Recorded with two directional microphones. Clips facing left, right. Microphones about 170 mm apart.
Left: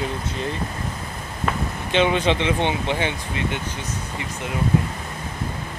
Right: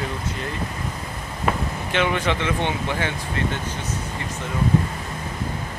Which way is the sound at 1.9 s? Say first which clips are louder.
Left 4 dB; 20° left (ahead or behind).